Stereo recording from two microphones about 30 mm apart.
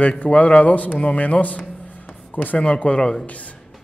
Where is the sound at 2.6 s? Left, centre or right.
Left.